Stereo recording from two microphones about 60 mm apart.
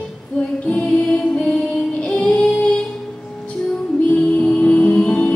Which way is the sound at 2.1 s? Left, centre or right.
Centre.